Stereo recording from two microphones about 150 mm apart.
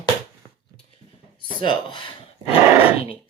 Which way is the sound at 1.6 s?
30° left (ahead or behind).